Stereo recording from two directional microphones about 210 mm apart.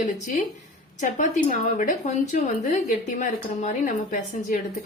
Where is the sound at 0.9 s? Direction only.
35° left (ahead or behind).